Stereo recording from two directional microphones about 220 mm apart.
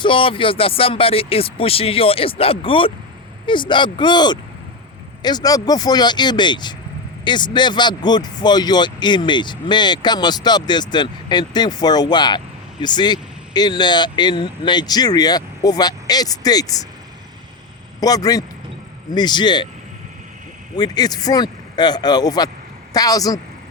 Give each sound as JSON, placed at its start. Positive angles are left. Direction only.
{"t": 0.0, "sound": "speech", "side_deg": 25}
{"t": 18.0, "sound": "speech", "side_deg": 15}
{"t": 20.7, "sound": "speech", "side_deg": 20}